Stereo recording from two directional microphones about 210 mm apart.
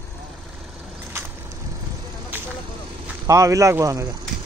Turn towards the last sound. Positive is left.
turn(degrees=-15)  # may be behind; listen again after turning